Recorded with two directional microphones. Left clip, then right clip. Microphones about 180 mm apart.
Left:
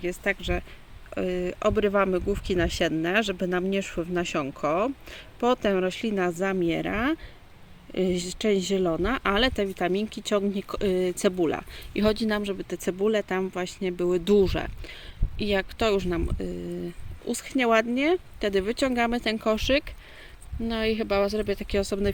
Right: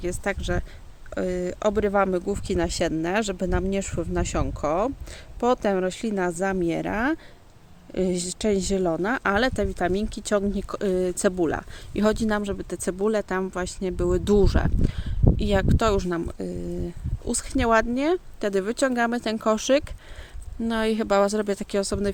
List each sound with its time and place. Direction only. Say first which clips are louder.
0.0 s speech: even; 5° right (ahead or behind)
17.5 s speech: right 1 dB; 5° right (ahead or behind)